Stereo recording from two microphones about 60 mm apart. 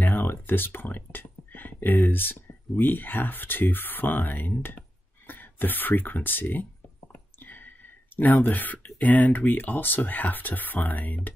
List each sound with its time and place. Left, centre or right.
0.0 s speech: left